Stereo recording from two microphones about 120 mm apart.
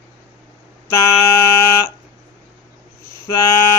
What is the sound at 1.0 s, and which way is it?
Speech, 25° left (ahead or behind).